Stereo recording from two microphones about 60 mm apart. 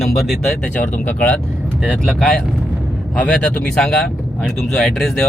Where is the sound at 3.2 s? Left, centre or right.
Left.